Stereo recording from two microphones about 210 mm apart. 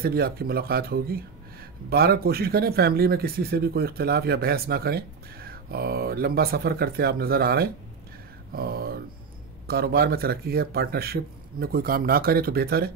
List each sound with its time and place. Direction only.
0.0 s speech: 45° right (ahead or behind)